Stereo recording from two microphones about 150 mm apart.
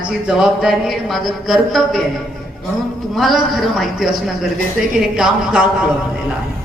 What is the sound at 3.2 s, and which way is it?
Speech, centre (ahead or behind).